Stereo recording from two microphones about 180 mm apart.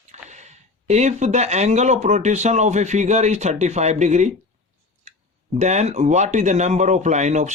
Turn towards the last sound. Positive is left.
turn(degrees=-40)  # may be behind; listen again after turning